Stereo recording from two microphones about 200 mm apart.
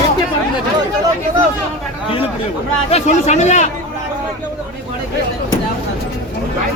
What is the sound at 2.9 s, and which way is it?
Speech, 35° left (ahead or behind).